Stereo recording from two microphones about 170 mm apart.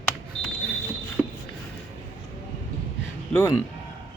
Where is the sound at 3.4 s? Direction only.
20° left (ahead or behind).